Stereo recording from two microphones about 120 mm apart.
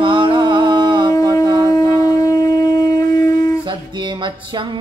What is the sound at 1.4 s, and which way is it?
Shofar, 30° right (ahead or behind).